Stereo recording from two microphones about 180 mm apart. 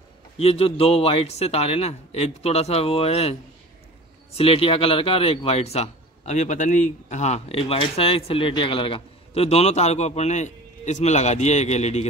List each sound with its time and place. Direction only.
0.4 s a man's voice: 30° left (ahead or behind)
4.4 s a man's voice: 30° left (ahead or behind)